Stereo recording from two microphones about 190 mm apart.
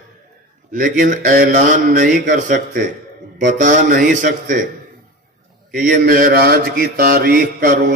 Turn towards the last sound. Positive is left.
turn(degrees=-45)  # may be behind; listen again after turning